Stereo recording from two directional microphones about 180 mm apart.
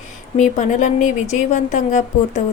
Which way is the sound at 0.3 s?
40° left (ahead or behind).